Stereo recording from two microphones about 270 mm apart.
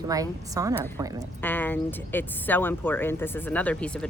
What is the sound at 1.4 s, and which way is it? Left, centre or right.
Speech, centre.